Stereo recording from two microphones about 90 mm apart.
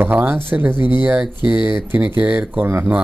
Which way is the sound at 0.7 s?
60° left (ahead or behind).